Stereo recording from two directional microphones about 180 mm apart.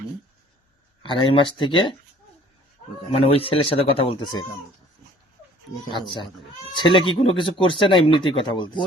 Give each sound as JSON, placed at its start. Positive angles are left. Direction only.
{"t": 1.0, "sound": "speech", "side_deg": 30}
{"t": 3.1, "sound": "speech", "side_deg": 30}
{"t": 5.9, "sound": "speech", "side_deg": 25}